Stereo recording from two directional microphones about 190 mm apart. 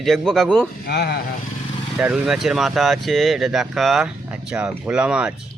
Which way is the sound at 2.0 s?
5° right (ahead or behind).